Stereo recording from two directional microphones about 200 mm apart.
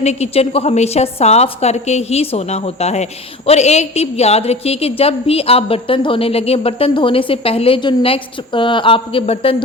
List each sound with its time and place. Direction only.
0.0 s a woman's voice: 35° left (ahead or behind)